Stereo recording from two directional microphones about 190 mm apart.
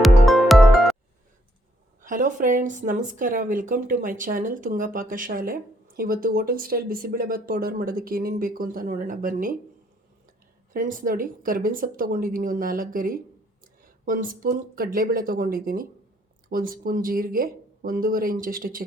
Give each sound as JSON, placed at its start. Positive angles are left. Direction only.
{"t": 0.3, "sound": "music", "side_deg": 0}
{"t": 2.0, "sound": "speech", "side_deg": -45}
{"t": 10.7, "sound": "speech", "side_deg": -45}